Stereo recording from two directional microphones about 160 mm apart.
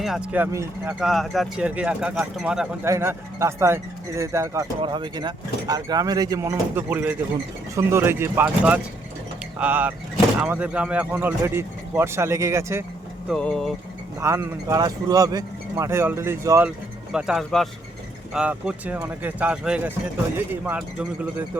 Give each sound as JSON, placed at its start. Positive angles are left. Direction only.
{"t": 0.0, "sound": "speech", "side_deg": -5}
{"t": 4.8, "sound": "speech", "side_deg": -30}
{"t": 13.2, "sound": "speech", "side_deg": 5}
{"t": 14.2, "sound": "speech", "side_deg": -15}
{"t": 16.6, "sound": "speech", "side_deg": -5}